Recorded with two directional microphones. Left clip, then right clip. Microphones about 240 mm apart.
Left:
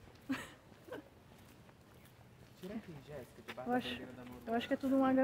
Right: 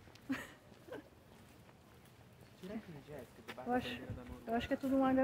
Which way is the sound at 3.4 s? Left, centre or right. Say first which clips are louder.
Left 1 dB; centre.